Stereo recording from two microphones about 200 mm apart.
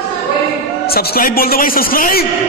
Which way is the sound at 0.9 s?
50° left (ahead or behind).